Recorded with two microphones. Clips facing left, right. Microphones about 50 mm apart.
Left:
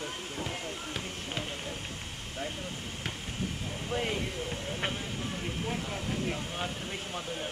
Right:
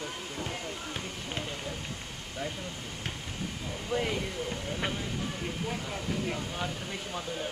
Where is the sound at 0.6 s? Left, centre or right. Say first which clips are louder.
Even; left.